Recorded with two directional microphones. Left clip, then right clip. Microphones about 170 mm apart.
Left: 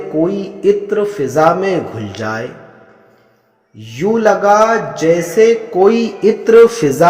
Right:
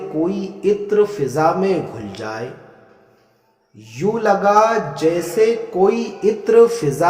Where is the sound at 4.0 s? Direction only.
15° left (ahead or behind).